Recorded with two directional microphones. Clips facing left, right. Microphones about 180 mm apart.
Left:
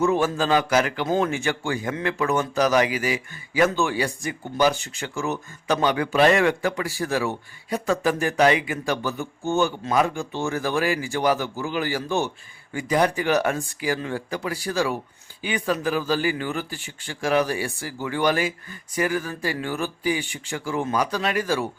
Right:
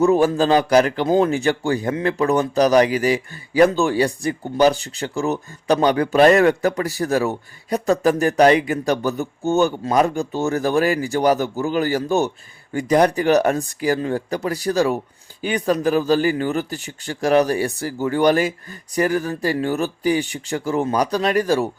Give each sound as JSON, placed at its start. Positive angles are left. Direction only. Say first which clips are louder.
{"t": 0.0, "sound": "speech", "louder": "right 6 dB", "side_deg": -35}